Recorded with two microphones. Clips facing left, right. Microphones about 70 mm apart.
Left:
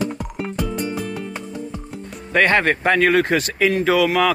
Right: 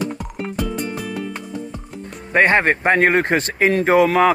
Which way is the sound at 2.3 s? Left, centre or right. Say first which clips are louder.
Right 2 dB; right.